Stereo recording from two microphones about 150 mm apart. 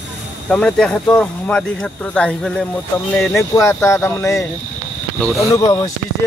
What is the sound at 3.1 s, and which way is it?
Speech, 15° left (ahead or behind).